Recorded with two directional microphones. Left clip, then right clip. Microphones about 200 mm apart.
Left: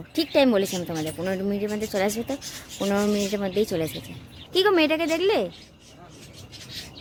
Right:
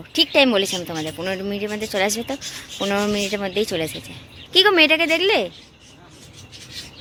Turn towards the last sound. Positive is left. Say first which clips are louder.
# right 5 dB
turn(degrees=0)  # may be behind; listen again after turning